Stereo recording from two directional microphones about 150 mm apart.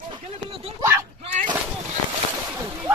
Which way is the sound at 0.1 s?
40° right (ahead or behind).